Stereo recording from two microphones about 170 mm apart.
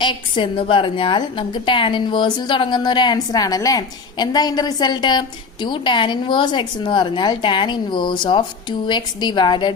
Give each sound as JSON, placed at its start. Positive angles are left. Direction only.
{"t": 0.0, "sound": "a woman's voice", "side_deg": 30}